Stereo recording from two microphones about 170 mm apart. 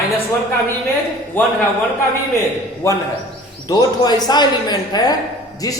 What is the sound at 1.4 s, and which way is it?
Speech, 10° left (ahead or behind).